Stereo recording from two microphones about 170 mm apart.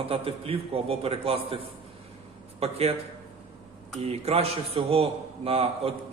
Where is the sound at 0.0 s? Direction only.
35° right (ahead or behind).